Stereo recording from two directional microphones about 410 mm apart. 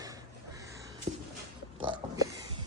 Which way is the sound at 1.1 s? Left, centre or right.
Centre.